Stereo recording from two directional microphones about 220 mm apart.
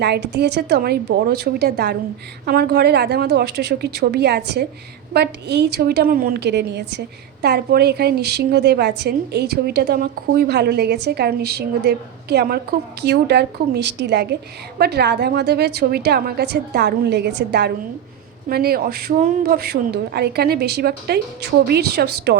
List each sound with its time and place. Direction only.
0.0 s a woman's voice: 50° right (ahead or behind)